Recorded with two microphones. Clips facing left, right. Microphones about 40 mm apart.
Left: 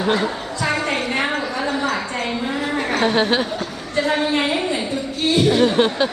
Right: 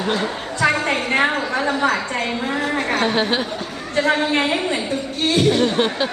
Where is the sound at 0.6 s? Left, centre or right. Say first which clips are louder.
Right 4 dB; right.